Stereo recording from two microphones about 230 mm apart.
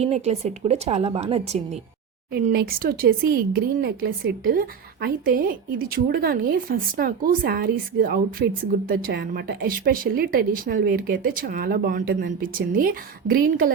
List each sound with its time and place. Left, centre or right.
0.0 s a woman's voice: right
2.3 s speech: right